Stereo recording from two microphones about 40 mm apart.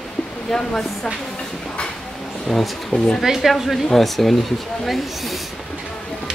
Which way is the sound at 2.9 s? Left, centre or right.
Centre.